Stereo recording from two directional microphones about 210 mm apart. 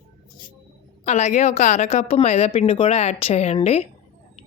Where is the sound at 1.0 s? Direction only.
35° left (ahead or behind).